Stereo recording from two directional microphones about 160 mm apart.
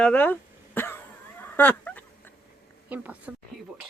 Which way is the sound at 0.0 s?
10° left (ahead or behind).